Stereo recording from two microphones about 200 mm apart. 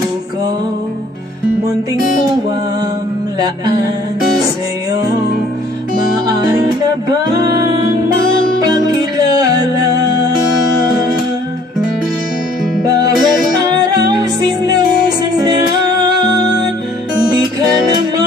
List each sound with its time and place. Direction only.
8.6 s music: 20° right (ahead or behind)
12.8 s music: 20° right (ahead or behind)
16.0 s music: 20° right (ahead or behind)